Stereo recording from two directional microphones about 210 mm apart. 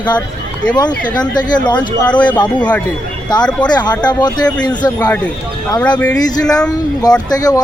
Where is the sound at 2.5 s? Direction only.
5° left (ahead or behind).